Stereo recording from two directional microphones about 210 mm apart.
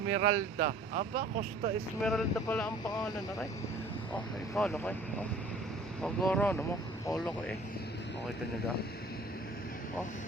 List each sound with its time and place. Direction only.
0.2 s speech: 40° right (ahead or behind)
2.0 s speech: 5° left (ahead or behind)
4.5 s speech: 5° left (ahead or behind)
6.0 s speech: 5° left (ahead or behind)